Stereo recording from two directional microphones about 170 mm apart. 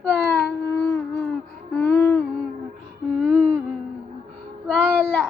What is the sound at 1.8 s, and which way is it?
Humming, 15° left (ahead or behind).